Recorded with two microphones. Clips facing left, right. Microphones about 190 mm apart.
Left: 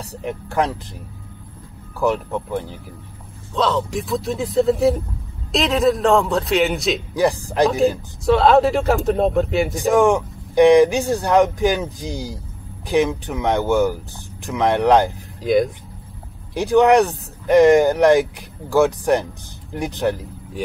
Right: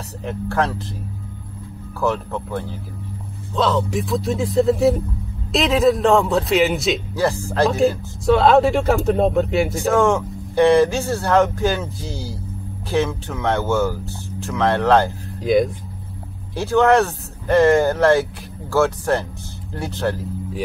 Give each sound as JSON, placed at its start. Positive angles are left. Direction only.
{"t": 0.2, "sound": "speech", "side_deg": 15}
{"t": 2.0, "sound": "speech", "side_deg": 15}
{"t": 3.5, "sound": "speech", "side_deg": 0}
{"t": 7.2, "sound": "speech", "side_deg": 15}
{"t": 8.3, "sound": "speech", "side_deg": 0}
{"t": 9.8, "sound": "speech", "side_deg": 15}
{"t": 15.4, "sound": "speech", "side_deg": 0}
{"t": 16.5, "sound": "speech", "side_deg": 15}